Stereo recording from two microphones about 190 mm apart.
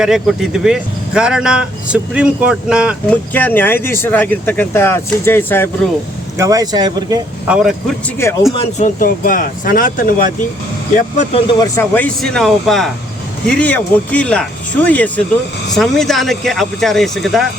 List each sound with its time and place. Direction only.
0.0 s speech: 5° right (ahead or behind)
3.1 s speech: 10° left (ahead or behind)
6.3 s speech: 15° right (ahead or behind)
7.4 s speech: 5° right (ahead or behind)
8.2 s speech: 15° left (ahead or behind)
9.0 s speech: 45° left (ahead or behind)
11.5 s speech: 15° left (ahead or behind); by 17.4 s centre (ahead or behind)